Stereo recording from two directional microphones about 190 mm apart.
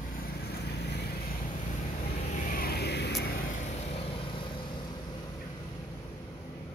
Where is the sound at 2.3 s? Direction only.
50° left (ahead or behind).